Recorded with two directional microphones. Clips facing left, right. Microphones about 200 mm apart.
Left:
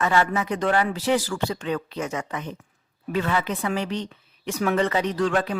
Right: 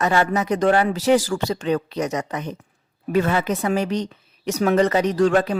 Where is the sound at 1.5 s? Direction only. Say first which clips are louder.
Right 5 dB; 30° right (ahead or behind).